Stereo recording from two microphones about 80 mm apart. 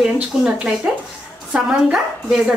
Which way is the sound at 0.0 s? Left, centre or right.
Centre.